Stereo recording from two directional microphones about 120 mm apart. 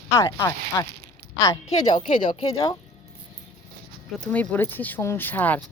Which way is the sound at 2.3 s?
55° left (ahead or behind).